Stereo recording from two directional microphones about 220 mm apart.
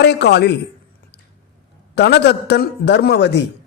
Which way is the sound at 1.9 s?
50° left (ahead or behind).